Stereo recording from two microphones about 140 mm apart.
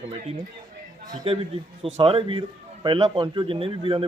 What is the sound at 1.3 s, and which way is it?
Speech, 40° right (ahead or behind).